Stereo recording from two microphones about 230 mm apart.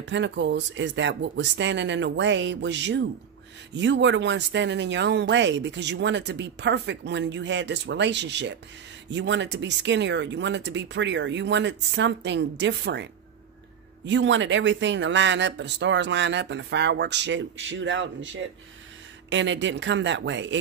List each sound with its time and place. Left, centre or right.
0.0 s speech: right